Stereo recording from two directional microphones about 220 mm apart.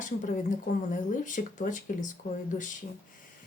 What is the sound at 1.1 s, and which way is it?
Speech, 35° left (ahead or behind).